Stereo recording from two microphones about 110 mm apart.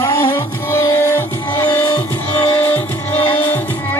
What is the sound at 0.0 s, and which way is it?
Music, 25° left (ahead or behind).